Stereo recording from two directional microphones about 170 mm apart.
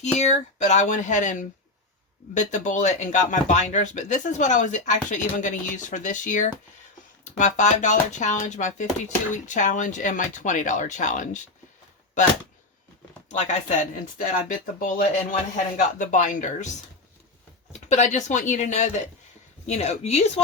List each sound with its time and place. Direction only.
0.2 s speech: 45° left (ahead or behind)
13.3 s speech: 45° left (ahead or behind)
17.7 s a woman's voice: 40° left (ahead or behind)